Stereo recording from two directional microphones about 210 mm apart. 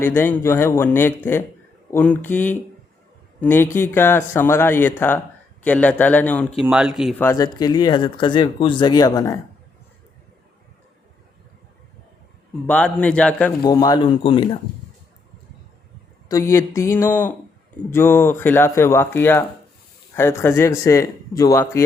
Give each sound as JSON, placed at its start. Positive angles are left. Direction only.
{"t": 0.0, "sound": "a man's voice", "side_deg": 10}
{"t": 7.2, "sound": "speech", "side_deg": 15}
{"t": 12.6, "sound": "speech", "side_deg": 5}
{"t": 13.6, "sound": "speech", "side_deg": 20}
{"t": 16.3, "sound": "speech", "side_deg": 15}